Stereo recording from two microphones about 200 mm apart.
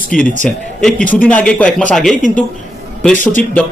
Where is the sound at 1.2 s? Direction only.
5° left (ahead or behind).